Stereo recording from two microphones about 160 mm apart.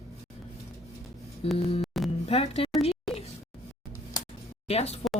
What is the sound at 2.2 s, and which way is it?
Speech, 40° left (ahead or behind).